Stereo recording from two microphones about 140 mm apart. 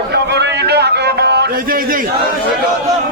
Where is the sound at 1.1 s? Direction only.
90° right.